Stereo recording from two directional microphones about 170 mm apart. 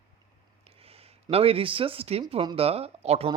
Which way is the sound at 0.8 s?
35° right (ahead or behind).